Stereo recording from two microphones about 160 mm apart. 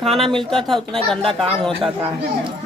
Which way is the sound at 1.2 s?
30° right (ahead or behind).